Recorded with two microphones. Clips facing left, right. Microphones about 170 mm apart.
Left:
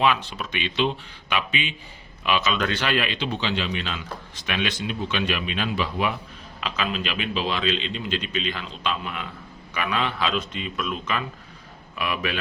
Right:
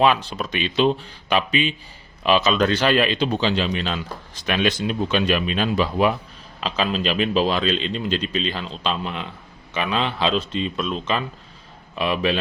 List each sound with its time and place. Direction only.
0.0 s a man's voice: 35° right (ahead or behind)